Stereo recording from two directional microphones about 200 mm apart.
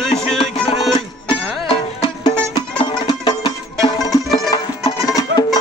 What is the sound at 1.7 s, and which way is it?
Music, 20° left (ahead or behind).